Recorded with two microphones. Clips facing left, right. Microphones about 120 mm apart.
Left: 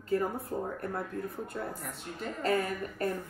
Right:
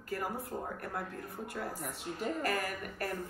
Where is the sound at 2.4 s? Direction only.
25° left (ahead or behind).